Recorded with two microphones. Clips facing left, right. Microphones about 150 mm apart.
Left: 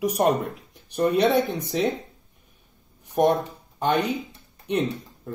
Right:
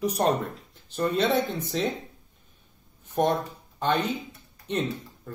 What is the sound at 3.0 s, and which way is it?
Speech, 15° left (ahead or behind).